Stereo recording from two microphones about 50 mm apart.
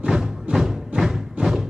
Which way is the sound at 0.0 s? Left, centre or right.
Centre.